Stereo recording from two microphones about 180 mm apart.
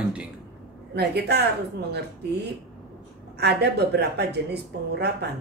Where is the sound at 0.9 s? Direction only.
65° right (ahead or behind).